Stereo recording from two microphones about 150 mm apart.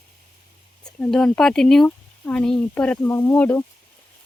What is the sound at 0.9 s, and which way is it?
Speech, 5° left (ahead or behind).